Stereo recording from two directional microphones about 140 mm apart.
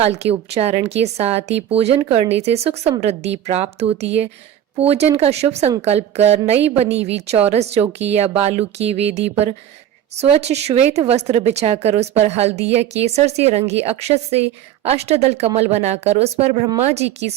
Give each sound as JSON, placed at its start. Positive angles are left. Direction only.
{"t": 0.0, "sound": "a woman's voice", "side_deg": -50}